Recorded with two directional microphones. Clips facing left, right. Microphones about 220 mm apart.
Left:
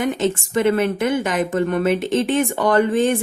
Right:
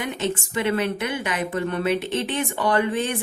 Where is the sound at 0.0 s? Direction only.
45° left (ahead or behind).